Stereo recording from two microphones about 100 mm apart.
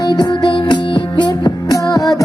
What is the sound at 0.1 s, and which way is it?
Music, 45° left (ahead or behind).